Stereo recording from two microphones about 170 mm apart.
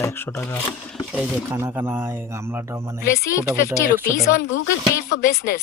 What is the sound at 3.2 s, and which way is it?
Speech, 15° left (ahead or behind).